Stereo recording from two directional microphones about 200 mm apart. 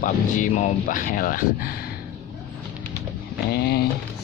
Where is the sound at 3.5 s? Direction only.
50° left (ahead or behind).